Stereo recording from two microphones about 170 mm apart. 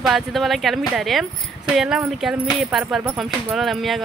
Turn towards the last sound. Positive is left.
turn(degrees=0)  # may be behind; listen again after turning